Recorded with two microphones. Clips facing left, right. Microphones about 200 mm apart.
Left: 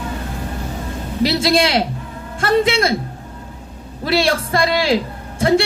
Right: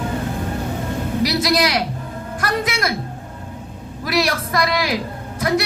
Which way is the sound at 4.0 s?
30° left (ahead or behind).